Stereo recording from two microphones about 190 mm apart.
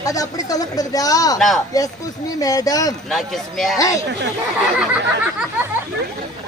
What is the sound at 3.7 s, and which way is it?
Speech, 15° left (ahead or behind).